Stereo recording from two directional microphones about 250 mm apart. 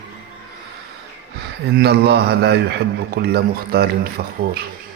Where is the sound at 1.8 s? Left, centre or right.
Right.